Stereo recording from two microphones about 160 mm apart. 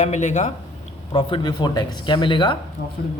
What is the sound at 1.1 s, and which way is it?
Speech, 30° left (ahead or behind).